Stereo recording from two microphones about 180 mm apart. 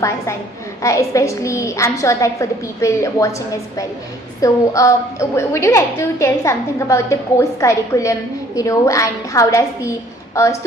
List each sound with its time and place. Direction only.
0.8 s a woman's voice: 15° left (ahead or behind)